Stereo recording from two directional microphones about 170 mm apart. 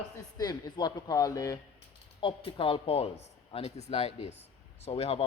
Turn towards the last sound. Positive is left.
turn(degrees=35)  # may be behind; listen again after turning